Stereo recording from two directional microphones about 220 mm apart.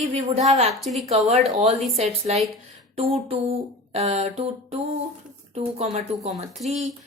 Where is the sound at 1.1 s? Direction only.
30° right (ahead or behind).